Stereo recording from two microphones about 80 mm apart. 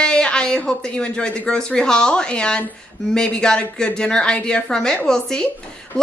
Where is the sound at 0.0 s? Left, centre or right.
Centre.